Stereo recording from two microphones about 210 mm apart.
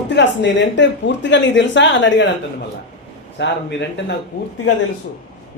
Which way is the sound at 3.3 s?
55° left (ahead or behind).